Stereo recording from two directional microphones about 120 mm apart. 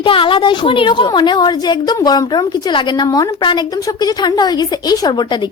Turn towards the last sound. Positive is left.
turn(degrees=35)  # may be behind; listen again after turning